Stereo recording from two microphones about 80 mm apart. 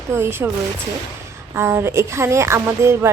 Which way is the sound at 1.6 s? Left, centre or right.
Right.